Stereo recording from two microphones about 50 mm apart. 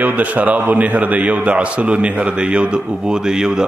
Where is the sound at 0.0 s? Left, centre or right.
Right.